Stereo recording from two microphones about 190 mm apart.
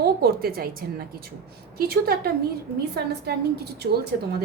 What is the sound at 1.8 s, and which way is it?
A woman's voice, 50° right (ahead or behind).